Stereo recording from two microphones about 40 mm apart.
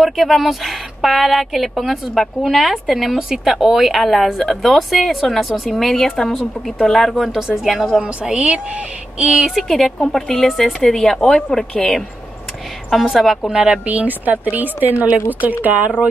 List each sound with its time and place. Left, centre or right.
0.0 s a woman's voice: centre
8.0 s speech: right
9.7 s a woman's voice: centre
12.9 s a woman's voice: centre
13.5 s speech: centre
13.8 s speech: right